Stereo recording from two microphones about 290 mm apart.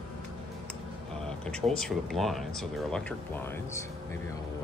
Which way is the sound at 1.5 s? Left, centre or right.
Centre.